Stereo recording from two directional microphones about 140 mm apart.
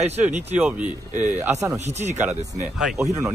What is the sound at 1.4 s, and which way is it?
Speech, 20° right (ahead or behind).